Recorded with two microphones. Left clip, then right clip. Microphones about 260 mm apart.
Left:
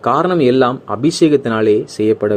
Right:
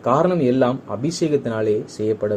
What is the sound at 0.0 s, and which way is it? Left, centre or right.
Speech, left.